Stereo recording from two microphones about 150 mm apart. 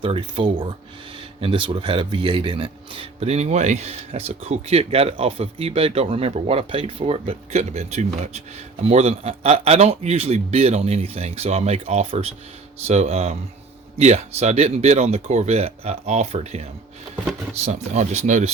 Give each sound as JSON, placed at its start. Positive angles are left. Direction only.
{"t": 0.0, "sound": "a man's voice", "side_deg": -35}